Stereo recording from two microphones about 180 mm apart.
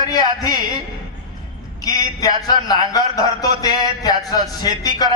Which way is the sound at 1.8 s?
20° left (ahead or behind).